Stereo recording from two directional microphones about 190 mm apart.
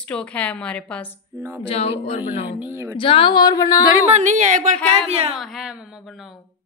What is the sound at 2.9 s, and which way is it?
Speech, 30° left (ahead or behind).